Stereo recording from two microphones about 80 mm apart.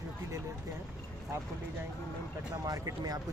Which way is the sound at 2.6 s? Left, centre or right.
Right.